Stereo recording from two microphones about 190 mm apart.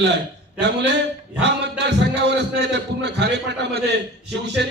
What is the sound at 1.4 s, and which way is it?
A man's voice, 65° right (ahead or behind).